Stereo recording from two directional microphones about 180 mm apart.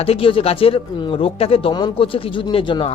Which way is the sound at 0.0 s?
30° left (ahead or behind).